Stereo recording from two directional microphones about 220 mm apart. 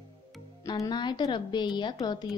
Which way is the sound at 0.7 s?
20° left (ahead or behind).